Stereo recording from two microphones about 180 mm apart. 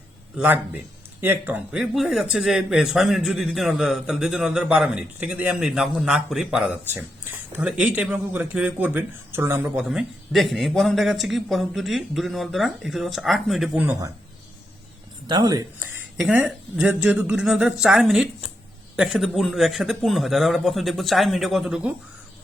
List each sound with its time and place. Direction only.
0.3 s a man's voice: 10° right (ahead or behind)
9.8 s speech: centre (ahead or behind)
15.3 s speech: 20° right (ahead or behind)
16.1 s speech: 5° right (ahead or behind)